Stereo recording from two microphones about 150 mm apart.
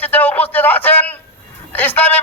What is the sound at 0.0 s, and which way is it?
A man's voice, 10° left (ahead or behind).